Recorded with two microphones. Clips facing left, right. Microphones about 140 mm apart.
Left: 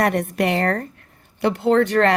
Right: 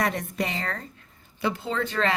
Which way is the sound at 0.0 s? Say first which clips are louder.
Left 8 dB; 65° left (ahead or behind).